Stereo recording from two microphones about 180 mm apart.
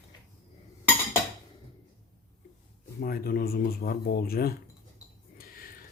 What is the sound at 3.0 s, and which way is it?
Speech, 55° left (ahead or behind).